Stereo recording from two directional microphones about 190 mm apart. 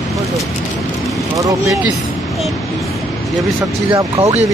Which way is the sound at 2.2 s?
Centre (ahead or behind).